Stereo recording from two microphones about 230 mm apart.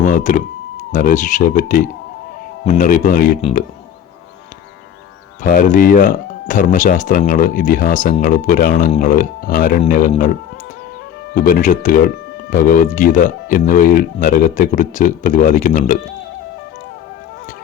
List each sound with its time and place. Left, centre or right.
0.0 s power windows: left
0.9 s speech: left
3.4 s speech: left
5.4 s speech: left
11.3 s speech: left